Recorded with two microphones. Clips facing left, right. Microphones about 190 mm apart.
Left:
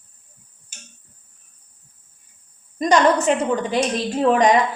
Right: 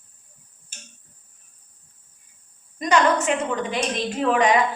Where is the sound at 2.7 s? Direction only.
35° left (ahead or behind).